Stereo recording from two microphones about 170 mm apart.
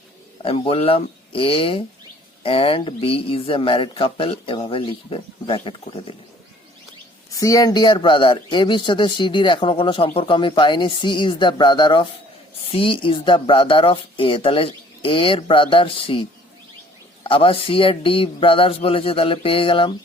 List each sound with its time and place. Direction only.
0.4 s speech: 35° left (ahead or behind)
7.3 s a man's voice: 20° left (ahead or behind)
17.2 s speech: 30° left (ahead or behind)